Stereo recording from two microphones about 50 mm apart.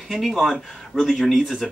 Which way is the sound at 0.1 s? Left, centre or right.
Centre.